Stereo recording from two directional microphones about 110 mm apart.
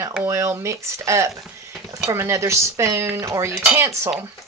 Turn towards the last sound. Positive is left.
turn(degrees=-25)  # may be behind; listen again after turning